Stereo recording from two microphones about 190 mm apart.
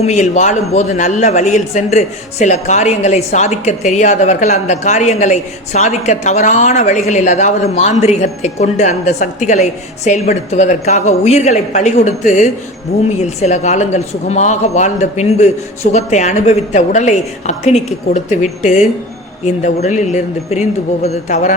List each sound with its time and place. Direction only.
0.0 s a man's voice: 40° left (ahead or behind)